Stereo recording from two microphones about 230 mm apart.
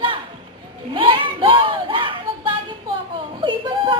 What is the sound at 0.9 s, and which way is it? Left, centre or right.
Speech, right.